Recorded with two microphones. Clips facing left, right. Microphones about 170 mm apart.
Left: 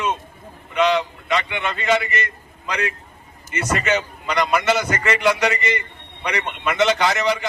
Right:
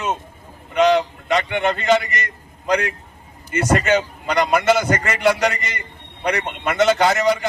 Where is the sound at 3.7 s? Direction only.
55° right (ahead or behind); by 7.3 s 40° right (ahead or behind).